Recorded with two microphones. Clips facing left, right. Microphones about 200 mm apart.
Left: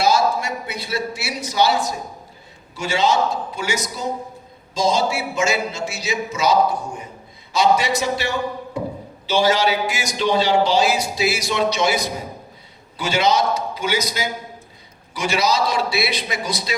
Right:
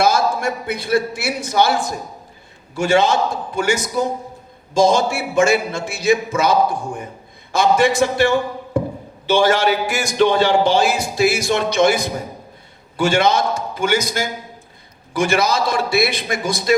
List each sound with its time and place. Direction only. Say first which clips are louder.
0.0 s a man's voice: right 2 dB; 50° right (ahead or behind)